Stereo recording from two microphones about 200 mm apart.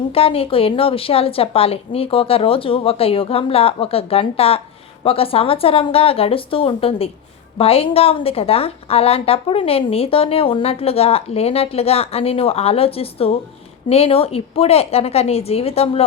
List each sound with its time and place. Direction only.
0.1 s a woman's voice: 30° left (ahead or behind)